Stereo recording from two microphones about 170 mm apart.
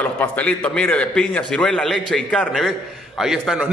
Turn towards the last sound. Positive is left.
turn(degrees=0)  # may be behind; listen again after turning